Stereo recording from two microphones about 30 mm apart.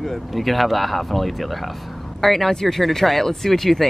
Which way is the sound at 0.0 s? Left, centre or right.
Centre.